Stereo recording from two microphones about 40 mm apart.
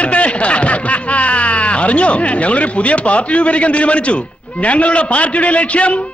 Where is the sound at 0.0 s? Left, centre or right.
Left.